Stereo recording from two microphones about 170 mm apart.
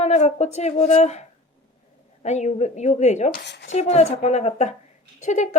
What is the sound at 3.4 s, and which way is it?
Speech, 85° left.